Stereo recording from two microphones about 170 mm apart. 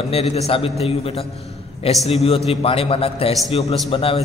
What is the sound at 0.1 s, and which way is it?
A man's voice, 40° left (ahead or behind).